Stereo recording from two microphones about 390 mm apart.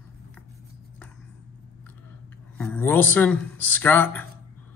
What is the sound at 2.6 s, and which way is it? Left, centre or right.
Speech, centre.